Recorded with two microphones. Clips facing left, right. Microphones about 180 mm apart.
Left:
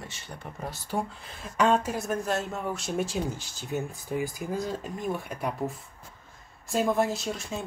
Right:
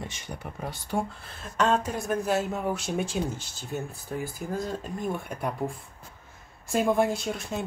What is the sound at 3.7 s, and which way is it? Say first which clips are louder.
Speech: left 2 dB; 15° left (ahead or behind).